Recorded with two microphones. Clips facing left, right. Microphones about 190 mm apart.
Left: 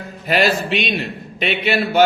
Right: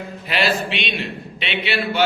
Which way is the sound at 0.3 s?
45° left (ahead or behind).